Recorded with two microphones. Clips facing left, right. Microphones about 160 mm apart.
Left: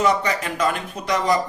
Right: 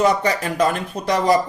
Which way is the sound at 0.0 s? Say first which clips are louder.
Right 2 dB; 35° right (ahead or behind).